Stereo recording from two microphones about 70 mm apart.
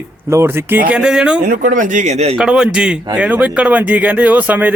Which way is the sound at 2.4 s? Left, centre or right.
Centre.